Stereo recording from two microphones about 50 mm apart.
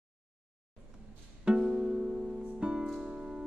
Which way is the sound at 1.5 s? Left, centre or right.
Centre.